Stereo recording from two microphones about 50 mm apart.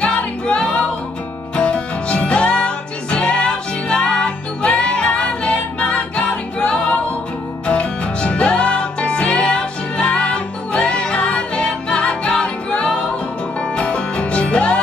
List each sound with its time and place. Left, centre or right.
0.0 s music: left